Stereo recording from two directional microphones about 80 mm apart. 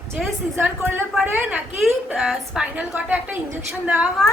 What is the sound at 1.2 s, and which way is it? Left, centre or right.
A woman's voice, centre.